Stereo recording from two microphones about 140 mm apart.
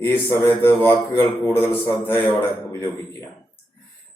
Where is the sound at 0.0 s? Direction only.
15° left (ahead or behind).